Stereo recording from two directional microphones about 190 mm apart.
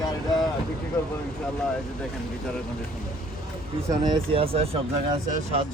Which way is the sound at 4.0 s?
25° right (ahead or behind).